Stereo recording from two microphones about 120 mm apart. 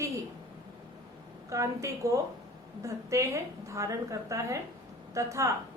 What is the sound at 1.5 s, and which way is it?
A woman's voice, 25° right (ahead or behind).